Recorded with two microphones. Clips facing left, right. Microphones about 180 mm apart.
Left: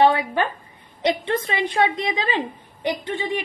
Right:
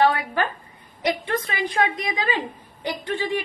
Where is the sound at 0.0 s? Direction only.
25° left (ahead or behind).